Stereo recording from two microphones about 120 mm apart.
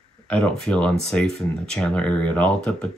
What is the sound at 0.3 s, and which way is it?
Speech, 5° left (ahead or behind).